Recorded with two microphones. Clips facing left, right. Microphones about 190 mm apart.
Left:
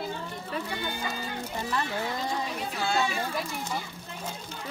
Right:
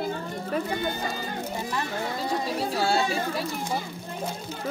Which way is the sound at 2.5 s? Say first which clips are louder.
Right 6 dB; 35° right (ahead or behind).